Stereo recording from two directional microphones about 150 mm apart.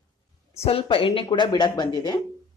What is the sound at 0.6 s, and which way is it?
Speech, 40° left (ahead or behind).